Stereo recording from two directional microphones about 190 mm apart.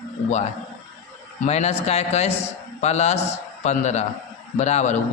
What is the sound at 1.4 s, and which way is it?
A man's voice, 35° left (ahead or behind).